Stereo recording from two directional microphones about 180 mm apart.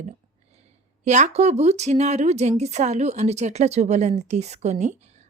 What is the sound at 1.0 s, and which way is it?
Speech, 40° right (ahead or behind).